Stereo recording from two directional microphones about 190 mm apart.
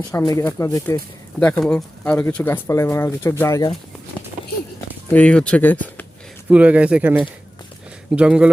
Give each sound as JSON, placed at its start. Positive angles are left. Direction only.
{"t": 0.1, "sound": "speech", "side_deg": 15}
{"t": 5.0, "sound": "speech", "side_deg": 5}
{"t": 6.5, "sound": "speech", "side_deg": -5}